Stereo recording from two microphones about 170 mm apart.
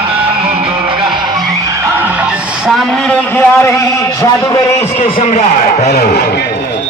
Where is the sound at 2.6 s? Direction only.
5° left (ahead or behind).